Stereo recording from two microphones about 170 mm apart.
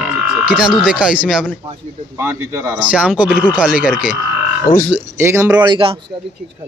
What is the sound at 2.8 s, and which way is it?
Speech, 5° right (ahead or behind).